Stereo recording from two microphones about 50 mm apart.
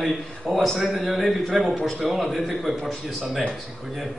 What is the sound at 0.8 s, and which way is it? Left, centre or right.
Speech, centre.